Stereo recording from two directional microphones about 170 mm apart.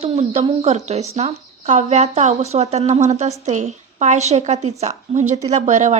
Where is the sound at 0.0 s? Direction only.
35° right (ahead or behind).